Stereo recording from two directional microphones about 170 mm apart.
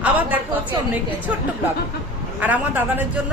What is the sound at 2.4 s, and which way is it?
Speech, 10° right (ahead or behind).